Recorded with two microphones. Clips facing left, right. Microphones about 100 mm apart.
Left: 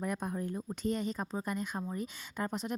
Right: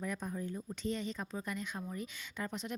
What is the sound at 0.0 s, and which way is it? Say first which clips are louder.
A woman's voice: left 4 dB; 50° left (ahead or behind).